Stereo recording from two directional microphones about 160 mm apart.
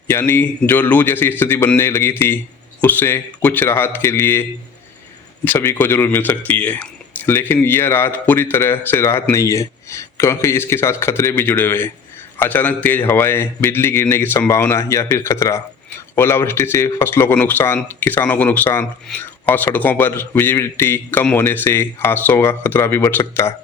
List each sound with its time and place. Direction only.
0.1 s speech: 15° left (ahead or behind)
5.5 s speech: 15° left (ahead or behind)